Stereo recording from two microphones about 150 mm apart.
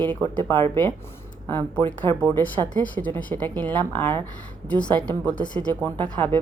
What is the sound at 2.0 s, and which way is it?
A woman's voice, 15° left (ahead or behind).